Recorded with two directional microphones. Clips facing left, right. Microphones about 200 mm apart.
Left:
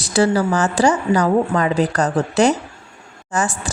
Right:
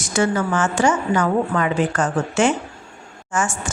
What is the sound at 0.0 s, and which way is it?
A woman's voice, 35° left (ahead or behind).